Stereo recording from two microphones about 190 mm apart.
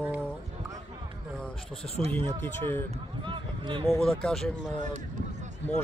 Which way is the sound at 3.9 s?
5° left (ahead or behind).